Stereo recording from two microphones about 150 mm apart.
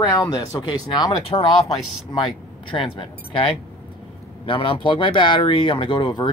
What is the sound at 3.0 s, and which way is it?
Speech, 35° left (ahead or behind).